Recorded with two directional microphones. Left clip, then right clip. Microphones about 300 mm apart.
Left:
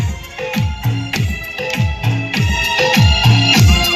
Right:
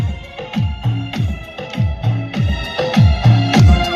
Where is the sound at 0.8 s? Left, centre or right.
Centre.